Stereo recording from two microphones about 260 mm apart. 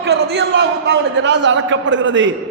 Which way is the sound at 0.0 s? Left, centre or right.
Right.